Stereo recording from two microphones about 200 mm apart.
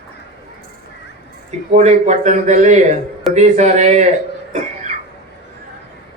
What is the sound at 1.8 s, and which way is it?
Speech, 35° right (ahead or behind).